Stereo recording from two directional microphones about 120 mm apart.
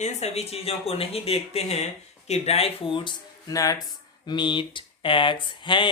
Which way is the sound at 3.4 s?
30° left (ahead or behind).